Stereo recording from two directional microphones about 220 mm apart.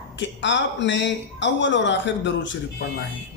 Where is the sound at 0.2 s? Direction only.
55° left (ahead or behind).